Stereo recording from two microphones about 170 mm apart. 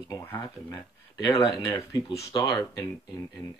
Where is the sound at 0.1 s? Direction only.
15° left (ahead or behind).